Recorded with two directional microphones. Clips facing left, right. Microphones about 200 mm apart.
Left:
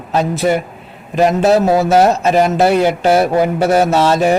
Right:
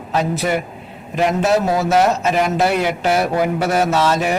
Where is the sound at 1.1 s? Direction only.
35° left (ahead or behind).